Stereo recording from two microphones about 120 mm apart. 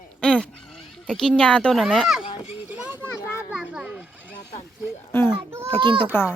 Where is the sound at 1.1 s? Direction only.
5° left (ahead or behind).